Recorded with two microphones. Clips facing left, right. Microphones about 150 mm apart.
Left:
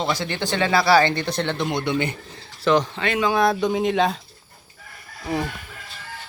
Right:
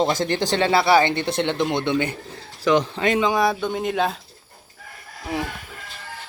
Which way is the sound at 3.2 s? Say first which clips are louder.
Left 3 dB; 15° right (ahead or behind).